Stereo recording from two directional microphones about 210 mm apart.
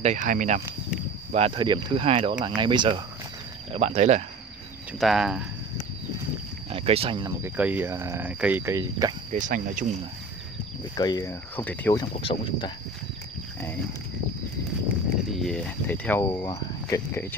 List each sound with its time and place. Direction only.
0.0 s speech: 35° right (ahead or behind)
1.3 s speech: 25° right (ahead or behind)
5.0 s speech: centre (ahead or behind)
6.7 s speech: 25° right (ahead or behind)
7.4 s speech: 5° right (ahead or behind)
9.3 s speech: 40° right (ahead or behind)
11.0 s speech: 20° left (ahead or behind)
12.3 s speech: 30° left (ahead or behind)
15.3 s speech: 5° left (ahead or behind)